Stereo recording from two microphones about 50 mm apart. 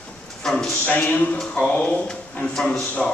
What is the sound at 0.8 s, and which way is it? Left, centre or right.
A man's voice, left.